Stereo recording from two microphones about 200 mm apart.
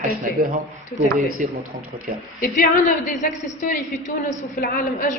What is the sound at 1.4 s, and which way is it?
Speech, 40° right (ahead or behind).